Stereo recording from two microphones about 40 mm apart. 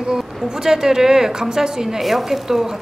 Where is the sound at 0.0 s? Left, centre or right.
Centre.